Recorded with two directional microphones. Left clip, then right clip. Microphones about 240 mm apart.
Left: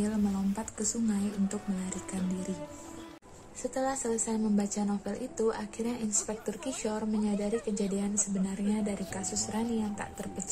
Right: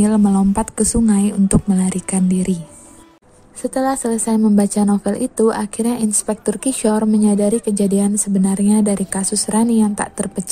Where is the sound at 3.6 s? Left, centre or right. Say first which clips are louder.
Right 13 dB; right.